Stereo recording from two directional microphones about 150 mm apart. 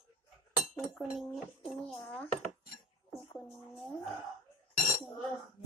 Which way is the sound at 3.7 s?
Centre (ahead or behind).